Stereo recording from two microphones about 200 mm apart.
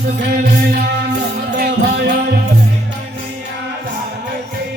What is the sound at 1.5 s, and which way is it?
Music, 50° right (ahead or behind).